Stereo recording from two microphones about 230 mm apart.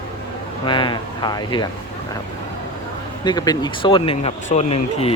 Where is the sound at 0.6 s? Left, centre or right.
Centre.